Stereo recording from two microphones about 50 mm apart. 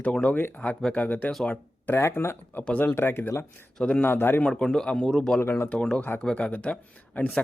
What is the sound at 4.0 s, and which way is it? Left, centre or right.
Speech, left.